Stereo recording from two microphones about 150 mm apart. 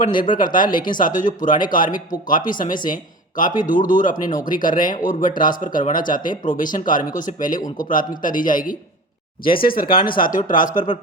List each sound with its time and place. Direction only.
0.1 s speech: 30° left (ahead or behind)
0.3 s a man's voice: 65° left (ahead or behind)
9.4 s speech: 75° left (ahead or behind)